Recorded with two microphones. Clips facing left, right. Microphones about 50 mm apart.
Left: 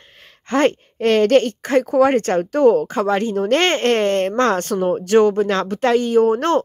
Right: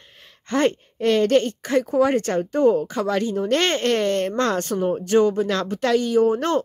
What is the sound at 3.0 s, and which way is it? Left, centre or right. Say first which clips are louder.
Speech: left 4 dB; left.